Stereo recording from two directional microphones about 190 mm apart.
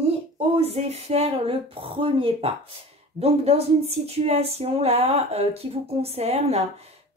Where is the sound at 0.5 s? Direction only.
35° right (ahead or behind).